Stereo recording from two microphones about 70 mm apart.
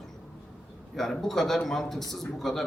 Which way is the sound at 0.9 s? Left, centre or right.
Centre.